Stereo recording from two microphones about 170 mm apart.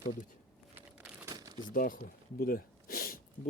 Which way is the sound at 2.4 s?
60° left (ahead or behind).